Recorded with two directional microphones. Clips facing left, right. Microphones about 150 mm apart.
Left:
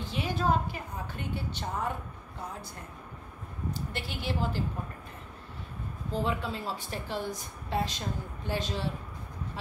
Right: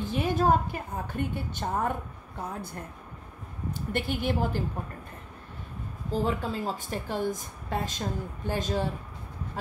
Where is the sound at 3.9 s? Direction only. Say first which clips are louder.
Right 9 dB; 50° right (ahead or behind).